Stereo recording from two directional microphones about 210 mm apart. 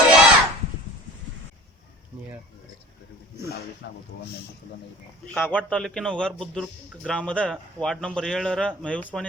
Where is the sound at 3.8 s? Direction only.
55° left (ahead or behind).